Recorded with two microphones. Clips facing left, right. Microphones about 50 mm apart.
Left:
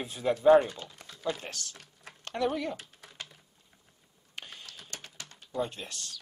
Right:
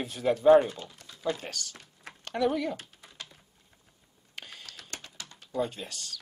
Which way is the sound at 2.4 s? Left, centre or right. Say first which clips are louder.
Right 3 dB; centre.